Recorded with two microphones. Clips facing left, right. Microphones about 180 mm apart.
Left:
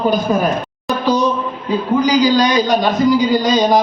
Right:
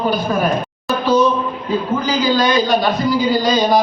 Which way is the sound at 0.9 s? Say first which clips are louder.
Right 1 dB; 15° left (ahead or behind).